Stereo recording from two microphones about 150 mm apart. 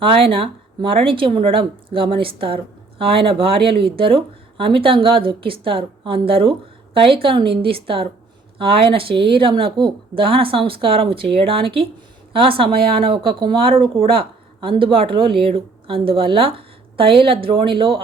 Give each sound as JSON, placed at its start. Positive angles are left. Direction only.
{"t": 0.0, "sound": "speech", "side_deg": -35}